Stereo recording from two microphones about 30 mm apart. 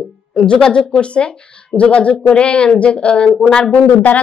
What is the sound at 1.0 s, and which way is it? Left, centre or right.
A woman's voice, left.